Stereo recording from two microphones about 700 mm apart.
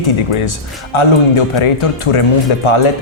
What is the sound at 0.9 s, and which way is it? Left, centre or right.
Speech, left.